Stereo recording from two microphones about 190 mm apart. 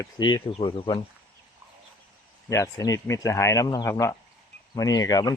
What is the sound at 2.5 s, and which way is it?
Speech, 15° left (ahead or behind).